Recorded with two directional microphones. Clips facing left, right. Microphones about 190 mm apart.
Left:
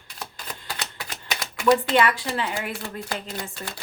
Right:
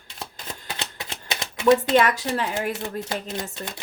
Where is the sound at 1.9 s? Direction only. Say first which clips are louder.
Right 2 dB; 40° right (ahead or behind).